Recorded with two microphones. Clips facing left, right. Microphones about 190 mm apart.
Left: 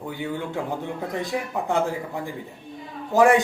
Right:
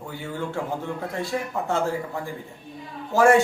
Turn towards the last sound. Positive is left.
turn(degrees=15)  # may be behind; listen again after turning